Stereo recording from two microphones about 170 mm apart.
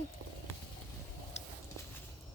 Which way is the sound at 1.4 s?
40° left (ahead or behind).